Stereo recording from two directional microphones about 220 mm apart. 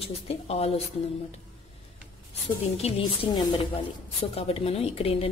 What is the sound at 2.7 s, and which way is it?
A woman's voice, 25° left (ahead or behind).